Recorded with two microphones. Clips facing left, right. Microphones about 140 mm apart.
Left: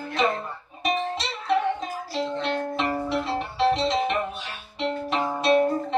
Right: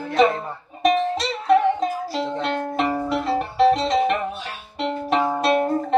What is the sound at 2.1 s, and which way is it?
Music, 55° right (ahead or behind).